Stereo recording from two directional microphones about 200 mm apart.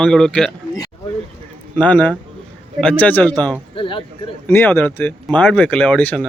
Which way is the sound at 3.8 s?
25° left (ahead or behind).